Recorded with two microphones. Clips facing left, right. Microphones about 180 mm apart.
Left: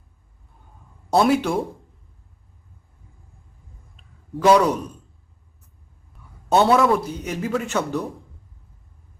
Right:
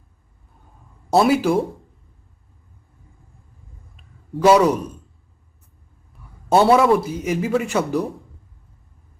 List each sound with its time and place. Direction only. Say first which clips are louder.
1.1 s speech: right 2 dB; 5° right (ahead or behind)
4.4 s speech: right 2 dB; 5° right (ahead or behind)
6.1 s a sound: right 3 dB; centre (ahead or behind)
6.5 s speech: right 3 dB; 5° right (ahead or behind)